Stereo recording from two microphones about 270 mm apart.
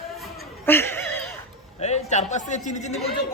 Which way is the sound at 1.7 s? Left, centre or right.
Left.